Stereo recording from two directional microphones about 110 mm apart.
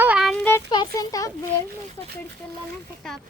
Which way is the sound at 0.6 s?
40° left (ahead or behind).